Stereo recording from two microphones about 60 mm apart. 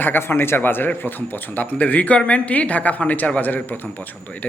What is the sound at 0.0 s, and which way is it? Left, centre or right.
Speech, left.